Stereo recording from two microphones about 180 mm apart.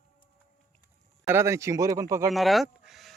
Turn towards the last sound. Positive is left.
turn(degrees=0)  # may be behind; listen again after turning